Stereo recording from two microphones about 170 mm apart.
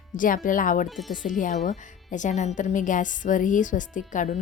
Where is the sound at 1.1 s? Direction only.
50° left (ahead or behind).